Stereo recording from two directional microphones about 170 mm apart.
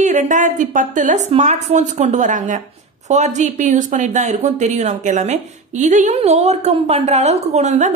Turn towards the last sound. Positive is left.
turn(degrees=-45)  # may be behind; listen again after turning